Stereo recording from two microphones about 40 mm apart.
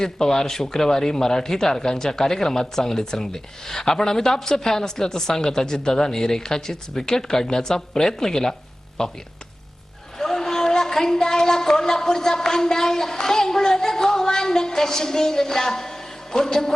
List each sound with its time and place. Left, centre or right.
0.0 s a woman's voice: centre
10.2 s a woman's voice: centre